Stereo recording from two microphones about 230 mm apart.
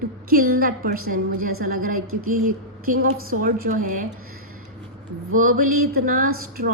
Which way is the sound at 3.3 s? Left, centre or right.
Right.